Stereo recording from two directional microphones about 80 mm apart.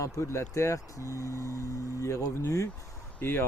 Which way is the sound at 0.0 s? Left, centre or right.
Left.